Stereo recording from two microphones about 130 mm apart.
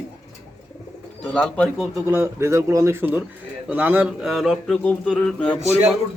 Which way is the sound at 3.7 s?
15° right (ahead or behind).